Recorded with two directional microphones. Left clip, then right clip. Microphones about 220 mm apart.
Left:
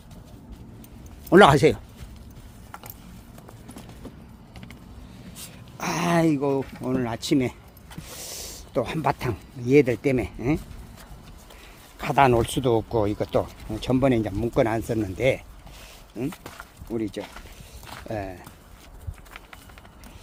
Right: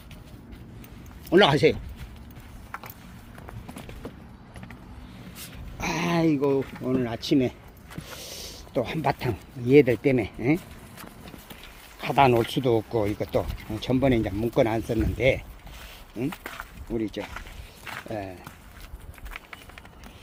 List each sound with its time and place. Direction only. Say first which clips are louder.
1.3 s speech: left 4 dB; 25° left (ahead or behind)
5.7 s speech: left 3 dB; 15° left (ahead or behind)
11.9 s speech: left 1 dB; 5° left (ahead or behind)
16.1 s speech: right 1 dB; centre (ahead or behind)
18.1 s speech: left 4 dB; 15° left (ahead or behind)